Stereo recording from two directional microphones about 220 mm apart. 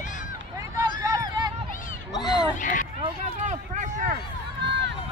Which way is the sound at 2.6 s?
35° left (ahead or behind).